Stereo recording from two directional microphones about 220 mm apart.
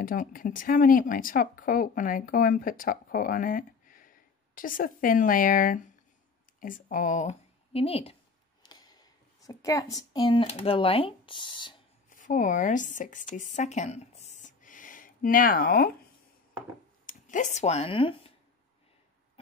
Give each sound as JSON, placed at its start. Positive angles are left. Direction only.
{"t": 0.0, "sound": "speech", "side_deg": 40}
{"t": 8.6, "sound": "a sound", "side_deg": 20}
{"t": 10.1, "sound": "speech", "side_deg": 20}
{"t": 12.1, "sound": "speech", "side_deg": 35}
{"t": 17.0, "sound": "speech", "side_deg": 35}